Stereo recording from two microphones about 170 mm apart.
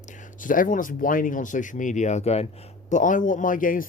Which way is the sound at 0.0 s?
45° left (ahead or behind).